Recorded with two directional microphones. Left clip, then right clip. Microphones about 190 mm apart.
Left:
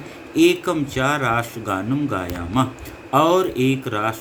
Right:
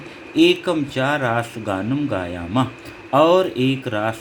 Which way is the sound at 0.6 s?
45° right (ahead or behind).